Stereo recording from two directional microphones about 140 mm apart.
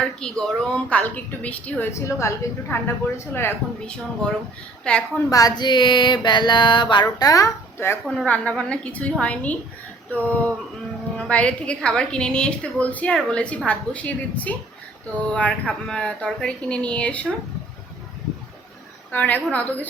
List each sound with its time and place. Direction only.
0.0 s a woman's voice: 5° left (ahead or behind)
1.9 s a woman's voice: 20° left (ahead or behind)
5.1 s a sound: 25° left (ahead or behind)
7.2 s speech: 25° left (ahead or behind)
8.0 s a woman's voice: 5° left (ahead or behind)
19.1 s a woman's voice: 10° left (ahead or behind)